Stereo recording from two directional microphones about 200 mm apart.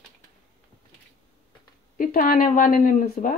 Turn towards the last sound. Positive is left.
turn(degrees=40)  # may be behind; listen again after turning